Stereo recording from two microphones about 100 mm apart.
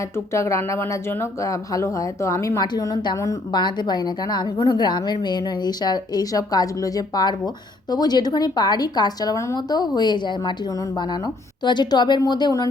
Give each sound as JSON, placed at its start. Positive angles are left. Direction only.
{"t": 0.3, "sound": "a woman's voice", "side_deg": 30}
{"t": 11.6, "sound": "a woman's voice", "side_deg": 50}